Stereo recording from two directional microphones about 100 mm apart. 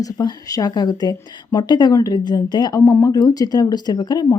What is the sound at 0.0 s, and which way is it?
Speech, 40° left (ahead or behind).